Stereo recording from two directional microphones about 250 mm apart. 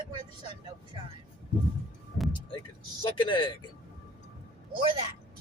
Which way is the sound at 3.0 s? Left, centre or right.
Centre.